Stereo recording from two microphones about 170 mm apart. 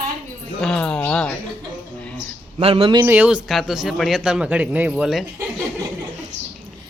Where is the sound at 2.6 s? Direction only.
35° right (ahead or behind).